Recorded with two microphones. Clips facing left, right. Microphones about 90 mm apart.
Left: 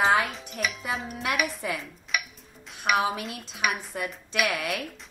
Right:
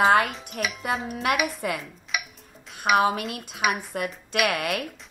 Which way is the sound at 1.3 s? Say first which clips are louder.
Right 3 dB; 60° right (ahead or behind).